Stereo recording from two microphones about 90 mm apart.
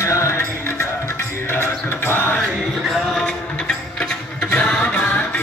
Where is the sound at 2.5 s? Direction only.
Centre (ahead or behind).